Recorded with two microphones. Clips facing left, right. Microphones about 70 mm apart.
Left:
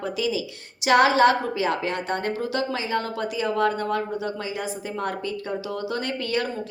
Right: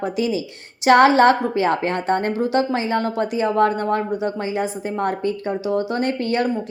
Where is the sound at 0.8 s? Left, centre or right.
Right.